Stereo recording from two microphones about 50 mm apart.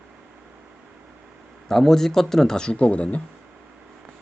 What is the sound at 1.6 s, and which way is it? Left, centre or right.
Speech, centre.